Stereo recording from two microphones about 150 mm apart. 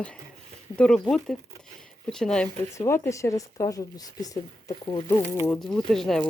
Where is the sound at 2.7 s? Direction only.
20° left (ahead or behind).